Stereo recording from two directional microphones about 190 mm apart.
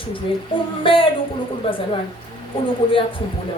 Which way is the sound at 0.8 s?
25° left (ahead or behind).